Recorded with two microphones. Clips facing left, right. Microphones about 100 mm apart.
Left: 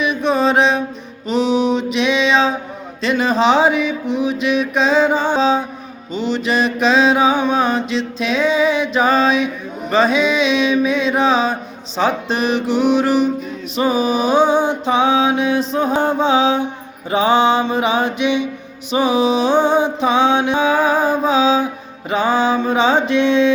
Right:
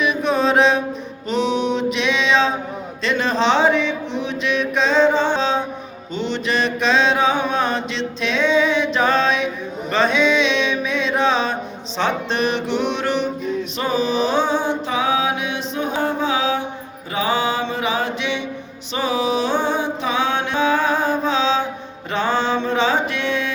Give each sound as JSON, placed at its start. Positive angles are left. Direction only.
{"t": 0.0, "sound": "mantra", "side_deg": 0}
{"t": 13.7, "sound": "music", "side_deg": 10}
{"t": 22.1, "sound": "mantra", "side_deg": 10}